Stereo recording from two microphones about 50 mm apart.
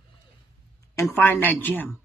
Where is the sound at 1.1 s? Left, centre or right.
Left.